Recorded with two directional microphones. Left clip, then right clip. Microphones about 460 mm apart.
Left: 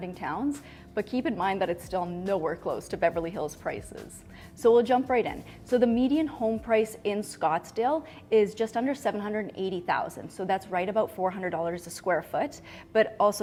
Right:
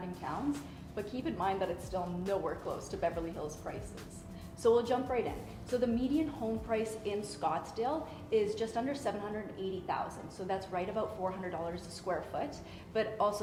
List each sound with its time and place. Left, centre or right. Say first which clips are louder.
0.2 s a woman's voice: left 6 dB; left